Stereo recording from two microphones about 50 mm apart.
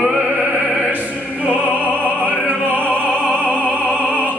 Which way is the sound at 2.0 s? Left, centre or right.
Right.